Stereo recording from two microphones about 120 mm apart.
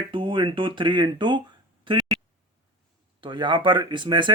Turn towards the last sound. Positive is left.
turn(degrees=-40)  # may be behind; listen again after turning